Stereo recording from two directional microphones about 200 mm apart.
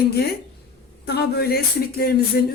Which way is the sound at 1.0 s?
55° left (ahead or behind).